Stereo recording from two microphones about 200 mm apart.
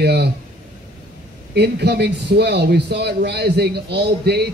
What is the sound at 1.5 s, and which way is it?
A man's voice, 55° right (ahead or behind).